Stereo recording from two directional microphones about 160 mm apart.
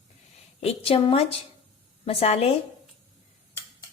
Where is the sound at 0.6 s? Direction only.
35° left (ahead or behind).